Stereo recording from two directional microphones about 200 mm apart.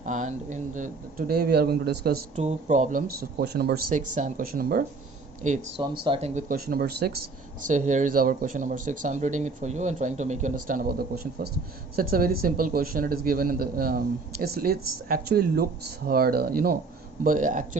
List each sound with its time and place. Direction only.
0.0 s speech: 40° right (ahead or behind)
1.3 s a man's voice: 55° right (ahead or behind)
2.3 s speech: 35° right (ahead or behind)
3.4 s speech: 55° right (ahead or behind)
3.9 s speech: 40° right (ahead or behind)
5.8 s speech: 25° right (ahead or behind); by 7.1 s 50° right (ahead or behind)
7.7 s a man's voice: 40° right (ahead or behind)